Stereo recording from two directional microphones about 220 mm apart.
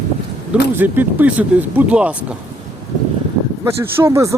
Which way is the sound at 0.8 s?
10° right (ahead or behind).